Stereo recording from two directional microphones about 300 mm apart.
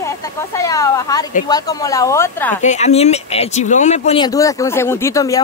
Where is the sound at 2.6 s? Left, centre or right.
Left.